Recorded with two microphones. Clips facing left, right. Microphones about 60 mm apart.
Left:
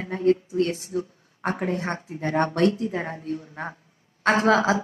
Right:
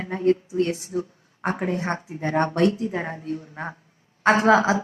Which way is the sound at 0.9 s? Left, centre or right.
Right.